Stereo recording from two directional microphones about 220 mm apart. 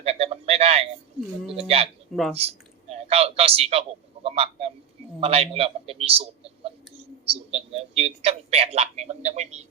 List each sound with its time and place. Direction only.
0.0 s a sound: 25° right (ahead or behind)
1.5 s speech: 25° right (ahead or behind)
2.1 s speech: centre (ahead or behind)
2.9 s a man's voice: 25° right (ahead or behind)